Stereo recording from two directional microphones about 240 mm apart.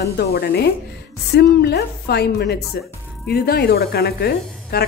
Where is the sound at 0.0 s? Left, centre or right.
Left.